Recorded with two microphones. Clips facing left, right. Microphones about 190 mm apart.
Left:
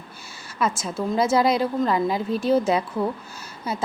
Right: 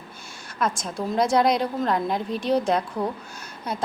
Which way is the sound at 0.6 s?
5° left (ahead or behind).